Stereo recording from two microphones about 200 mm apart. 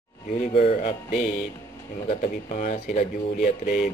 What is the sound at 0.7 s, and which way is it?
Speech, 35° left (ahead or behind).